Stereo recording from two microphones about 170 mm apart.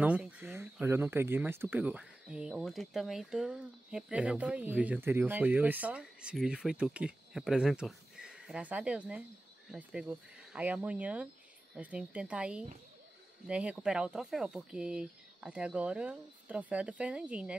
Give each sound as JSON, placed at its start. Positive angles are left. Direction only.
{"t": 0.0, "sound": "speech", "side_deg": -10}